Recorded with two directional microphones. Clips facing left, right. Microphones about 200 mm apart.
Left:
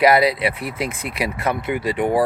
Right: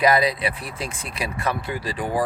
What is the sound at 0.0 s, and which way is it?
Speech, 25° left (ahead or behind).